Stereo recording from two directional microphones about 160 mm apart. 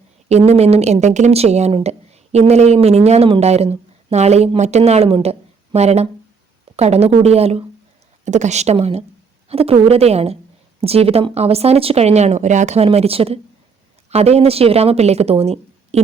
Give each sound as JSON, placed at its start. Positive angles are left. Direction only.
{"t": 0.3, "sound": "a woman's voice", "side_deg": -40}